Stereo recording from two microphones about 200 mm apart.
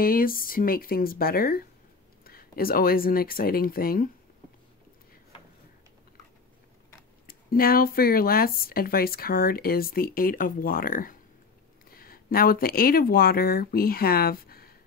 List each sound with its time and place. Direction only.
0.0 s speech: 45° left (ahead or behind)
7.2 s speech: 45° left (ahead or behind)